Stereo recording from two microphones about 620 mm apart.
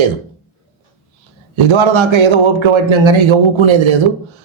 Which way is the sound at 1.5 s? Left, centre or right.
Right.